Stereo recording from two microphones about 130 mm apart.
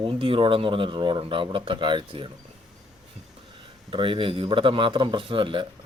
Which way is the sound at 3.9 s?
40° right (ahead or behind).